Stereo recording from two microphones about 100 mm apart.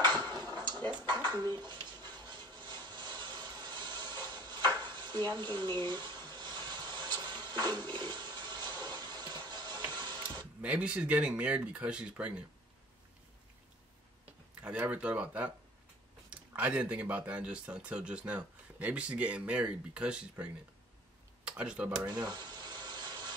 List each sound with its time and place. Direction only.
0.0 s dishes: 45° right (ahead or behind)
1.4 s rub: 45° right (ahead or behind)
4.8 s a sound: 45° right (ahead or behind)
7.9 s toilet flush: 45° right (ahead or behind)
10.6 s speech: 10° right (ahead or behind)
14.6 s speech: 15° right (ahead or behind)
21.5 s speech: 10° right (ahead or behind)
22.0 s a sound: 45° right (ahead or behind)